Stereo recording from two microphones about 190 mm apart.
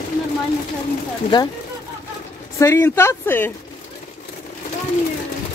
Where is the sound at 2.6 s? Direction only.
15° left (ahead or behind).